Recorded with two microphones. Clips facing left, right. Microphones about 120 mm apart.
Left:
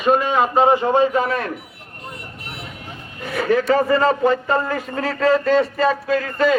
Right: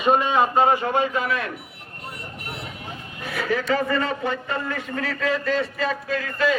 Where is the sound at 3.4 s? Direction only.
35° left (ahead or behind).